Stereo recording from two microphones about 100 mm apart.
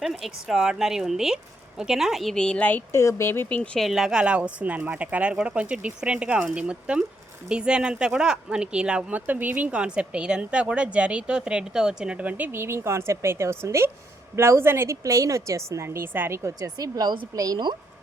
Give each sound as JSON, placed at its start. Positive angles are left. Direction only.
{"t": 0.0, "sound": "speech", "side_deg": 0}
{"t": 2.9, "sound": "speech", "side_deg": 30}
{"t": 3.6, "sound": "a woman's voice", "side_deg": 5}
{"t": 16.6, "sound": "speech", "side_deg": -40}